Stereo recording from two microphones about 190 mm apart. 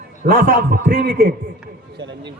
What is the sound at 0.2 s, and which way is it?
A man's voice, 50° right (ahead or behind).